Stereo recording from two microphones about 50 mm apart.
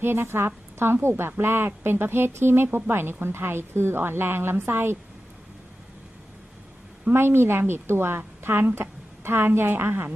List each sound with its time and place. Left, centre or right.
0.0 s a woman's voice: right
7.1 s a woman's voice: right